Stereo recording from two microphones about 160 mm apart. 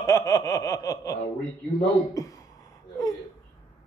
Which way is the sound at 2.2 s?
20° left (ahead or behind).